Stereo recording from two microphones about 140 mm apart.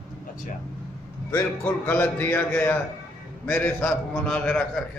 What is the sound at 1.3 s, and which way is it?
A man's voice, 15° left (ahead or behind).